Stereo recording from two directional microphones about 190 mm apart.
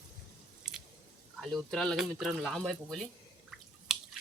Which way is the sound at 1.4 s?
5° left (ahead or behind).